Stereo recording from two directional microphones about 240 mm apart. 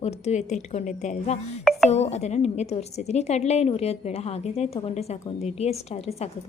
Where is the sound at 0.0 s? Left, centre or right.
Left.